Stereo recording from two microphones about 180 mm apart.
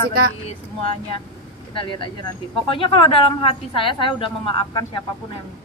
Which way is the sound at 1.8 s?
25° left (ahead or behind).